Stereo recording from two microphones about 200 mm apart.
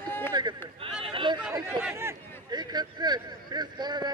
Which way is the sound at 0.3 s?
20° right (ahead or behind).